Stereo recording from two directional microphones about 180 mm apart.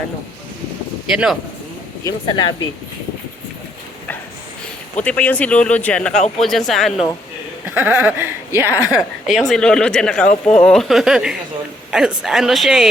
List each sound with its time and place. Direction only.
1.1 s a woman's voice: centre (ahead or behind)
2.0 s speech: 25° left (ahead or behind)
5.0 s a woman's voice: 10° left (ahead or behind); by 8.9 s 10° right (ahead or behind)
9.0 s a woman's voice: centre (ahead or behind)